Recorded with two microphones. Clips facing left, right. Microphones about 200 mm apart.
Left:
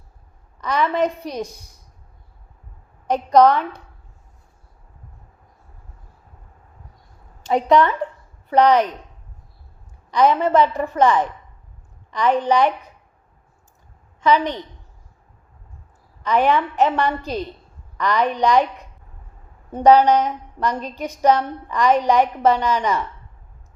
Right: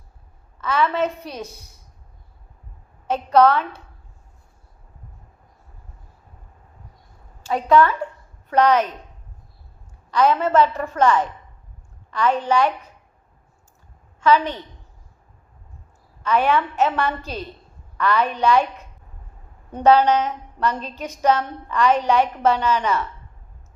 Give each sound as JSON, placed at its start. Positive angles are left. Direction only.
{"t": 0.6, "sound": "a woman's voice", "side_deg": 15}
{"t": 3.1, "sound": "a woman's voice", "side_deg": 15}
{"t": 7.4, "sound": "a woman's voice", "side_deg": 20}
{"t": 10.1, "sound": "a woman's voice", "side_deg": 15}
{"t": 14.2, "sound": "a woman's voice", "side_deg": 15}
{"t": 16.2, "sound": "a woman's voice", "side_deg": 15}